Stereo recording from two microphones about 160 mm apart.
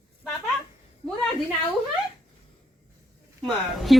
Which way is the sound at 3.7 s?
Centre (ahead or behind).